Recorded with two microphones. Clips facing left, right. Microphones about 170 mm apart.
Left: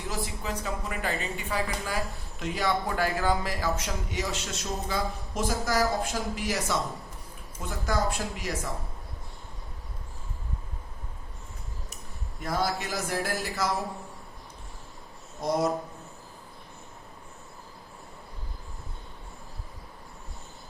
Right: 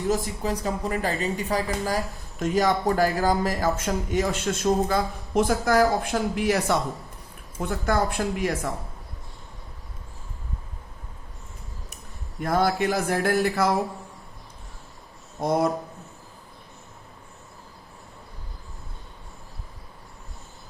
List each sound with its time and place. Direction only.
0.1 s speech: 40° right (ahead or behind)
12.4 s speech: 55° right (ahead or behind)
15.4 s speech: 55° right (ahead or behind)